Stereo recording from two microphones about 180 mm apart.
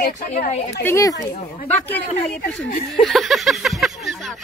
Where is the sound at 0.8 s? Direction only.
15° left (ahead or behind).